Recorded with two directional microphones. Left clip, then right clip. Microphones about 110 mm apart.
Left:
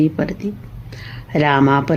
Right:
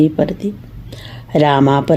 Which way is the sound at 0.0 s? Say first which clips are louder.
Right 4 dB; 35° right (ahead or behind).